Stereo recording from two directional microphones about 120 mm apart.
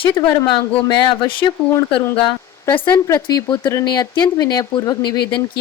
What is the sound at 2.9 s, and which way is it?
Speech, 25° left (ahead or behind).